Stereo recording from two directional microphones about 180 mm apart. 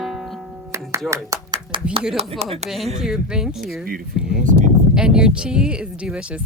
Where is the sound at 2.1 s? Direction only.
35° right (ahead or behind).